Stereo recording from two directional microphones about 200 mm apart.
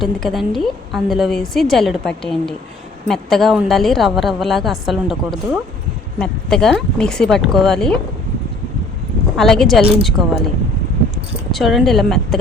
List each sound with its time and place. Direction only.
0.0 s a woman's voice: centre (ahead or behind)
9.3 s a woman's voice: centre (ahead or behind)
11.5 s a woman's voice: centre (ahead or behind)